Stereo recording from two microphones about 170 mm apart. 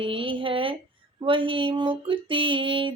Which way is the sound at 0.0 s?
30° right (ahead or behind).